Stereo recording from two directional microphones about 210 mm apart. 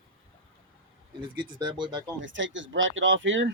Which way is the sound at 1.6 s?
20° right (ahead or behind).